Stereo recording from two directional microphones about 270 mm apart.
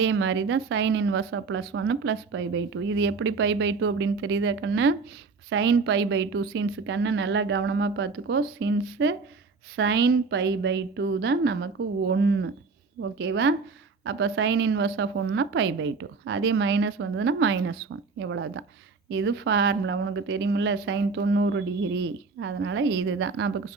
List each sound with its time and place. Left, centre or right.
0.0 s a woman's voice: right